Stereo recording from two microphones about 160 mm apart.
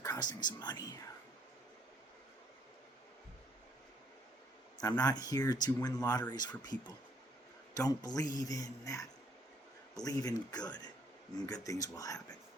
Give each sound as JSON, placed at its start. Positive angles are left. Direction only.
{"t": 0.0, "sound": "speech", "side_deg": 25}
{"t": 4.8, "sound": "speech", "side_deg": 25}